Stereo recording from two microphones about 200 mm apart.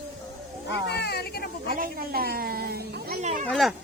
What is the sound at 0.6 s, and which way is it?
Speech, 55° left (ahead or behind).